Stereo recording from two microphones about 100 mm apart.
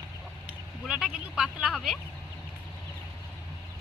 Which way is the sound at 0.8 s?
5° right (ahead or behind).